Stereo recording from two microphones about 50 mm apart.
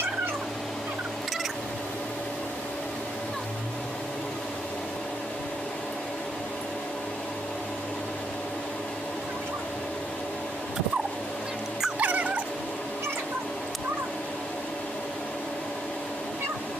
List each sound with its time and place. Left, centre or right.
12.0 s dog: right